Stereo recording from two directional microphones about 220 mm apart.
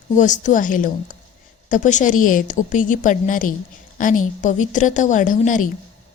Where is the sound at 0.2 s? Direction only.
35° left (ahead or behind).